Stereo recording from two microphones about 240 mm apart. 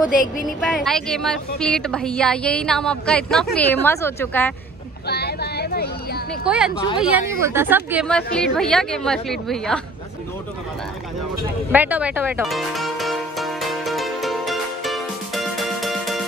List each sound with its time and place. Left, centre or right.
0.2 s speech: left
0.6 s a woman's voice: centre
5.0 s a sound: left
6.4 s a woman's voice: centre
8.1 s a woman's voice: centre
11.7 s music: centre